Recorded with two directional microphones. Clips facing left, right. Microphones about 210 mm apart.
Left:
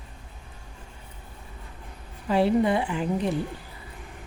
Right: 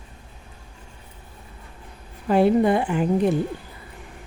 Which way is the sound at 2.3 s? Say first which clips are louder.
Right 4 dB; 50° right (ahead or behind).